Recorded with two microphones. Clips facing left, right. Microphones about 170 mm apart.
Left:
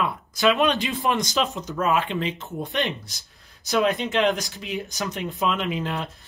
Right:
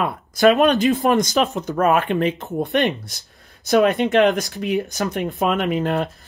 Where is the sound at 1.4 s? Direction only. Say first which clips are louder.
Right 6 dB; 60° right (ahead or behind).